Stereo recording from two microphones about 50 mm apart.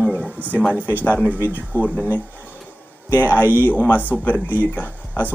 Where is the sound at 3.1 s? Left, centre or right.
Left.